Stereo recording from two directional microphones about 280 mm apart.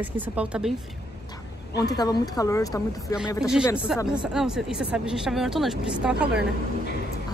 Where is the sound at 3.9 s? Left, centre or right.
Centre.